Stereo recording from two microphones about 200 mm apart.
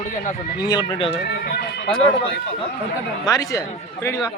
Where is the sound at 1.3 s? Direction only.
50° left (ahead or behind).